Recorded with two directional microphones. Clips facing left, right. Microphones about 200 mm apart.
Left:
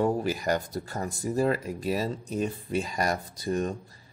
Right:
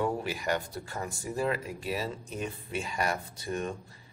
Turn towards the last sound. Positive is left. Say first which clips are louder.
# left 5 dB
turn(degrees=35)  # may be behind; listen again after turning